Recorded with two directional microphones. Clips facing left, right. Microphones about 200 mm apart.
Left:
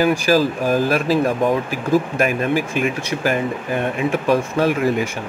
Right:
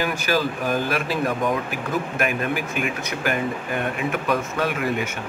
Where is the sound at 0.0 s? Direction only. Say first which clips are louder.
Left 7 dB; 35° left (ahead or behind).